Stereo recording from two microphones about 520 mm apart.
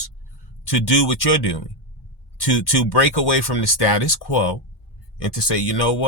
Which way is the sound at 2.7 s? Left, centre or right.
Left.